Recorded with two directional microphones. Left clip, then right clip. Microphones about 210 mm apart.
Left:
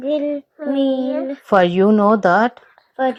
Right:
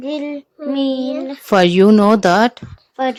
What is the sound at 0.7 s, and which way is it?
Speech, 25° right (ahead or behind).